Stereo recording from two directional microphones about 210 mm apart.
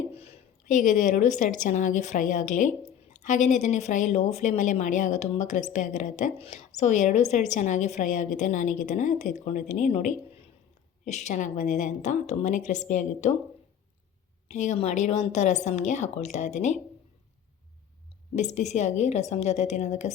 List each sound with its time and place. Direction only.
0.1 s speech: 30° left (ahead or behind)
14.5 s speech: 35° left (ahead or behind)
18.3 s speech: 35° left (ahead or behind)